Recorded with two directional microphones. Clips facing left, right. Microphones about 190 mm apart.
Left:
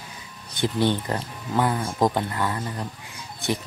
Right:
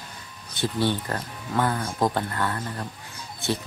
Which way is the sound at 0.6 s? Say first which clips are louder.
Left 2 dB; 20° left (ahead or behind).